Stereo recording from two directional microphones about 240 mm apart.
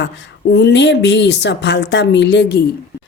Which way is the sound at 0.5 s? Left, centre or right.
Left.